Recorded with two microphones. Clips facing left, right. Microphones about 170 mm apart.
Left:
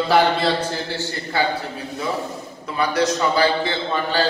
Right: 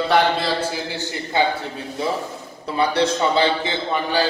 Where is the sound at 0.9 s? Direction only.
20° right (ahead or behind).